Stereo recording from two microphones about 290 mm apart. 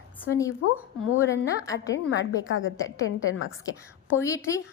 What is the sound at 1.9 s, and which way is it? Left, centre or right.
A woman's voice, left.